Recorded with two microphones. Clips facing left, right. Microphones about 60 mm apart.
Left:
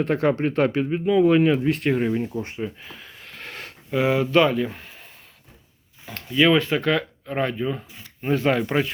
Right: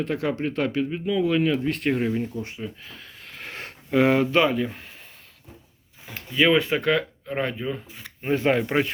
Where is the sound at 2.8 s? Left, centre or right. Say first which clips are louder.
Left 2 dB; centre.